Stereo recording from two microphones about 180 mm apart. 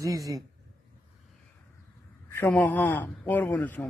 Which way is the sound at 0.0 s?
20° right (ahead or behind).